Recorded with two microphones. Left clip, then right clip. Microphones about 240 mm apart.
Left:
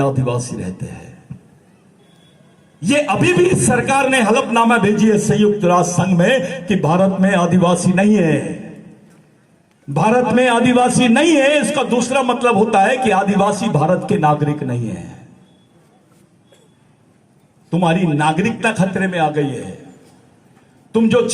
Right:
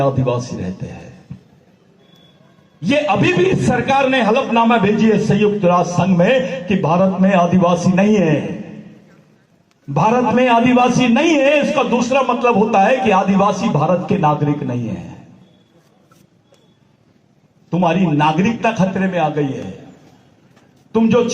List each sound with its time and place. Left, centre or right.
0.0 s a man's voice: left
2.8 s a man's voice: left
9.9 s a man's voice: left
17.7 s a man's voice: left
20.9 s a man's voice: left